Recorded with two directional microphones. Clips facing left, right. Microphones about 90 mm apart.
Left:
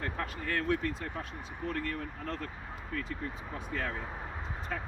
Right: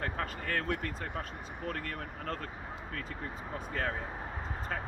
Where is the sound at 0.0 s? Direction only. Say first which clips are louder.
Even; 50° right (ahead or behind).